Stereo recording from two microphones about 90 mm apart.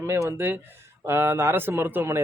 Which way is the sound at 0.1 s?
25° right (ahead or behind).